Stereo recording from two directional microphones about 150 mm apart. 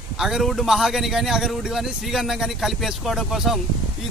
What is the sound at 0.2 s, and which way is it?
Speech, centre (ahead or behind).